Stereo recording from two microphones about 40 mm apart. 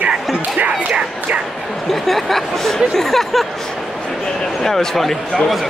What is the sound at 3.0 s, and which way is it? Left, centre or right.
Speech, centre.